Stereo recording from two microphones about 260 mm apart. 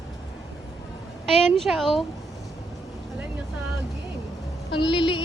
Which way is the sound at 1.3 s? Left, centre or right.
Centre.